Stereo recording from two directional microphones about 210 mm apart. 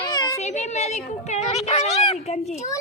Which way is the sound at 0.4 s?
30° left (ahead or behind).